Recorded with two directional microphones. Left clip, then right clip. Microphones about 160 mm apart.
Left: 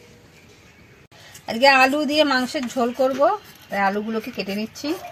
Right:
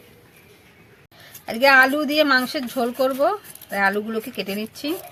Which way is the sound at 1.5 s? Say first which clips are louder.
Even; 5° left (ahead or behind).